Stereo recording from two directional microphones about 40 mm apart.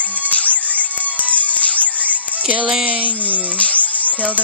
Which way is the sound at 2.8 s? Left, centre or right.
Right.